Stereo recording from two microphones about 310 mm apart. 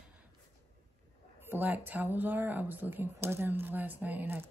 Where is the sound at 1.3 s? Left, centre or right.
Centre.